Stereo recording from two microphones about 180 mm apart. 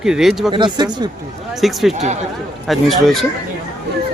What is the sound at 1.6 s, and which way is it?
A man's voice, centre (ahead or behind).